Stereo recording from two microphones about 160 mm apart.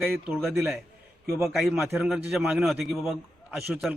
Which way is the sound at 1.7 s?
15° right (ahead or behind).